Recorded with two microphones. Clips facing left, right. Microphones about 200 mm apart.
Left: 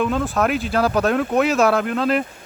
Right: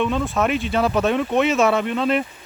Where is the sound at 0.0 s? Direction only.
Centre (ahead or behind).